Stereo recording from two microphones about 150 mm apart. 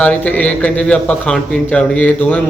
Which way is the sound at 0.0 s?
10° left (ahead or behind).